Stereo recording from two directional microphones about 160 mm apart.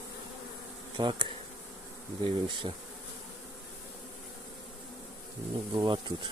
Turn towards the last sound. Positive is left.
turn(degrees=-30)  # may be behind; listen again after turning